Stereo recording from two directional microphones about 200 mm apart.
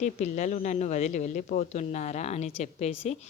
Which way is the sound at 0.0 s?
35° left (ahead or behind).